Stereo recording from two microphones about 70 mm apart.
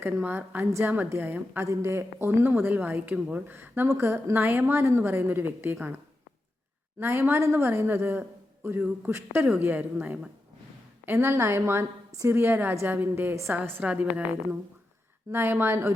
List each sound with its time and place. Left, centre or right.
0.0 s a woman's voice: right
0.6 s speech: right
0.9 s a woman's voice: right
1.6 s speech: right
7.0 s a woman's voice: right
15.3 s speech: right